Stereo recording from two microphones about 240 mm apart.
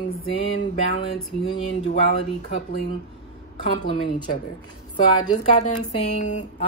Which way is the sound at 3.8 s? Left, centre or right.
Left.